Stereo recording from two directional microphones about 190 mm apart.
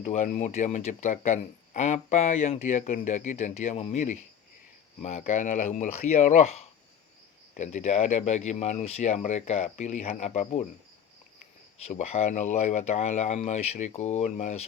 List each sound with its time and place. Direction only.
0.0 s speech: 35° left (ahead or behind)
11.9 s speech: 35° left (ahead or behind)